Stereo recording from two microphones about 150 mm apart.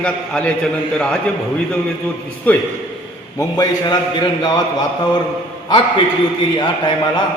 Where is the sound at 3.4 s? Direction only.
25° left (ahead or behind).